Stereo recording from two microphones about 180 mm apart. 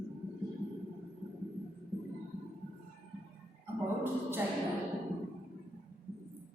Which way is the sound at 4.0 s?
10° right (ahead or behind).